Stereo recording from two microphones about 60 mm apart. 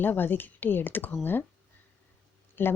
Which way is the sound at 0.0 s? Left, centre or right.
Left.